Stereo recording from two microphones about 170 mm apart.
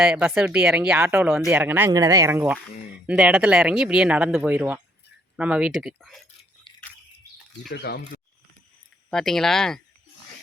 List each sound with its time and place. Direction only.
0.0 s speech: 5° right (ahead or behind)
7.7 s speech: 70° left (ahead or behind)
9.0 s speech: centre (ahead or behind)